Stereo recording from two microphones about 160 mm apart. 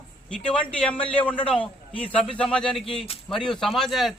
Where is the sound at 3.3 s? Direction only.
5° left (ahead or behind).